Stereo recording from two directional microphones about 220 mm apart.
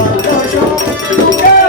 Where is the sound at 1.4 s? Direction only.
40° left (ahead or behind).